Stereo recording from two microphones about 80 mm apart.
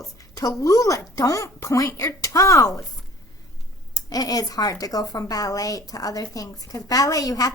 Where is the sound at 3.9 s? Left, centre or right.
Left.